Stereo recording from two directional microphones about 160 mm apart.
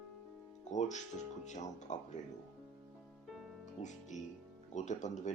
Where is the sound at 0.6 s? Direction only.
45° left (ahead or behind).